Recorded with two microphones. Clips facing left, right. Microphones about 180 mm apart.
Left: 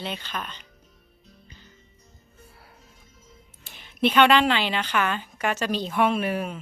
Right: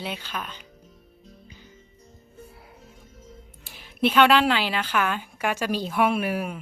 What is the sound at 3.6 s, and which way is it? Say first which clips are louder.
A woman's voice: even; 5° right (ahead or behind).